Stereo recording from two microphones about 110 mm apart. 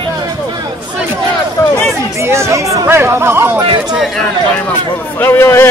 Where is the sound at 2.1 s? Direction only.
25° right (ahead or behind).